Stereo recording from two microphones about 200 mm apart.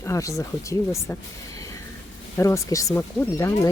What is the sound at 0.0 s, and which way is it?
Speech, 15° left (ahead or behind).